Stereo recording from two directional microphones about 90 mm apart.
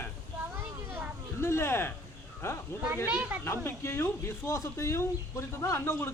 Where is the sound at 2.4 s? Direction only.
30° left (ahead or behind).